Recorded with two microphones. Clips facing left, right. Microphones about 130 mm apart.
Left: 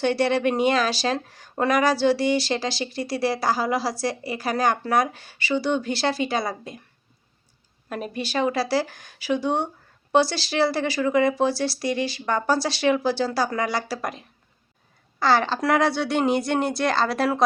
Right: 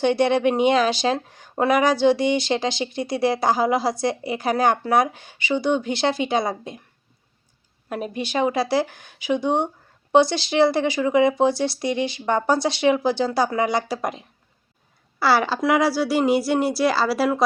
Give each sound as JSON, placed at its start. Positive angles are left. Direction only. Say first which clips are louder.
{"t": 0.0, "sound": "speech", "louder": "right 3 dB", "side_deg": -20}
{"t": 7.9, "sound": "speech", "louder": "right 2 dB", "side_deg": -15}
{"t": 15.2, "sound": "speech", "louder": "right 1 dB", "side_deg": -10}